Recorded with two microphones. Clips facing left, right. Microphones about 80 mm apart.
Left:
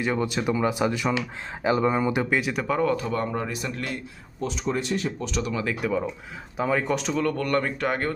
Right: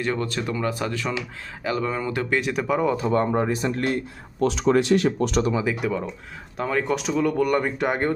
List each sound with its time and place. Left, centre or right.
0.0 s speech: centre
2.3 s speech: centre
3.1 s speech: right
4.4 s speech: right
5.8 s speech: centre